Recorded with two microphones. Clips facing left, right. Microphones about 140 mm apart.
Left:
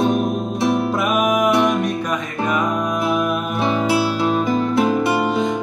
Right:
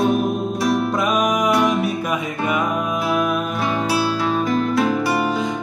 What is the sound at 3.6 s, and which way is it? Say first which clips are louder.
Music: left 4 dB; 25° left (ahead or behind).